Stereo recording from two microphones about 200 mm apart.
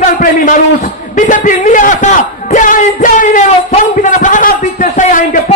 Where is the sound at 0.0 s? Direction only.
45° left (ahead or behind).